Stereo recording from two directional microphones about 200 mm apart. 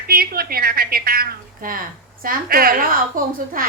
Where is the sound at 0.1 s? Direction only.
50° right (ahead or behind).